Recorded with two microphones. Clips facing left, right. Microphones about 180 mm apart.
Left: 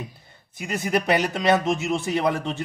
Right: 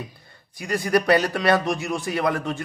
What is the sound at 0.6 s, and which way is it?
Speech, 20° left (ahead or behind).